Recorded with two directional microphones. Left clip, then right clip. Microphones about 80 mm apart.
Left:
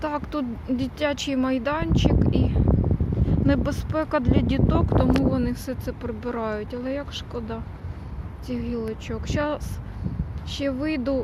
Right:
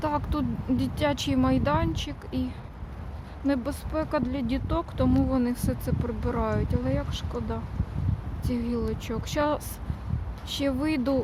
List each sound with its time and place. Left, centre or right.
0.0 s speech: centre
2.3 s speech: centre
3.4 s speech: centre
4.7 s speech: centre
4.9 s speech: centre
8.4 s speech: right